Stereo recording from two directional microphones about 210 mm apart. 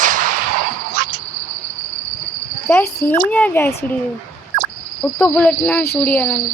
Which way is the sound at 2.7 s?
10° left (ahead or behind).